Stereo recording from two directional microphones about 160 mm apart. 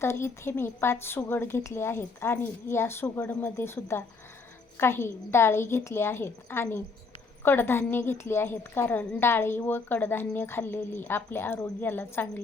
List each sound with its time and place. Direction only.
0.0 s a woman's voice: 15° left (ahead or behind)